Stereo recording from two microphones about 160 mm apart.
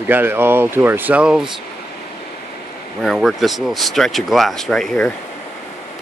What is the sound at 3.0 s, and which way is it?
Speech, centre (ahead or behind).